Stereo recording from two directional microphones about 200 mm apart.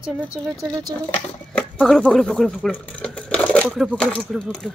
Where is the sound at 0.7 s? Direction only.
20° right (ahead or behind).